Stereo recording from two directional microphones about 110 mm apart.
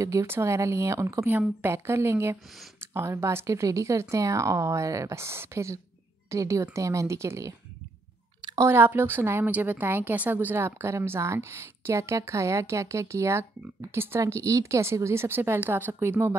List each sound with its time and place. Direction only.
0.0 s a woman's voice: 30° right (ahead or behind)
8.5 s a woman's voice: 20° right (ahead or behind)